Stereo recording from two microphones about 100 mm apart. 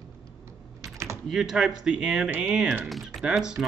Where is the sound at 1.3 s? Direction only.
5° right (ahead or behind).